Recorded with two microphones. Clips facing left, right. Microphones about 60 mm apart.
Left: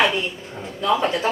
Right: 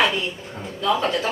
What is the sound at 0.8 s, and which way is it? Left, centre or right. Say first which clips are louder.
Speech: left 1 dB; centre.